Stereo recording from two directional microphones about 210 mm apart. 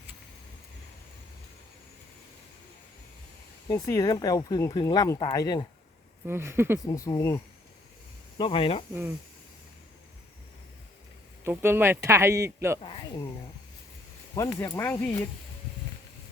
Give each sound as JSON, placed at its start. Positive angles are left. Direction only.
{"t": 3.7, "sound": "speech", "side_deg": 15}
{"t": 6.2, "sound": "speech", "side_deg": -10}
{"t": 6.8, "sound": "speech", "side_deg": 15}
{"t": 11.4, "sound": "speech", "side_deg": -10}
{"t": 12.8, "sound": "speech", "side_deg": 25}
{"t": 14.3, "sound": "speech", "side_deg": 15}